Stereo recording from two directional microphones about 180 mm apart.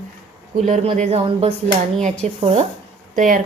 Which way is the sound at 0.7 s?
40° right (ahead or behind).